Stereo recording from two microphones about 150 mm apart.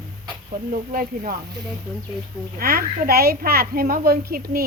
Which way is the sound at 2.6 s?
85° right.